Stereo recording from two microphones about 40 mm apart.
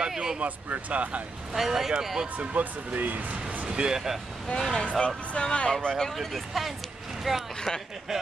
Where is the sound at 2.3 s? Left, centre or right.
Right.